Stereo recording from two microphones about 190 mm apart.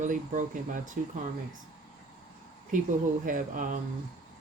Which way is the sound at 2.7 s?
45° right (ahead or behind).